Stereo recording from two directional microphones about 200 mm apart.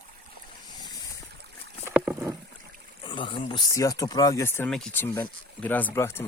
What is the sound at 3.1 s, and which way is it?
Speech, 25° left (ahead or behind).